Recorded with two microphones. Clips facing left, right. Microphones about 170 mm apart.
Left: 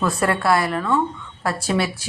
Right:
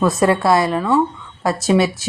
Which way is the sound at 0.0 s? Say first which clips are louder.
Right 5 dB; 20° right (ahead or behind).